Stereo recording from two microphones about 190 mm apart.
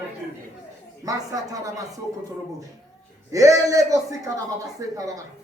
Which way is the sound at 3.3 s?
15° right (ahead or behind).